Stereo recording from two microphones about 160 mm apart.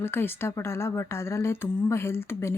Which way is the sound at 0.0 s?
15° left (ahead or behind).